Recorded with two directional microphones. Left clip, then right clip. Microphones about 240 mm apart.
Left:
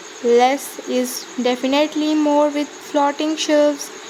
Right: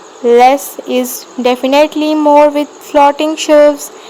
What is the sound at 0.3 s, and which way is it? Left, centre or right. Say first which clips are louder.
Speech: right 8 dB; centre.